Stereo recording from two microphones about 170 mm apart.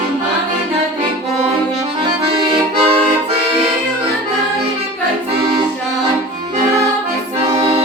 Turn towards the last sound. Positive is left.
turn(degrees=-25)  # may be behind; listen again after turning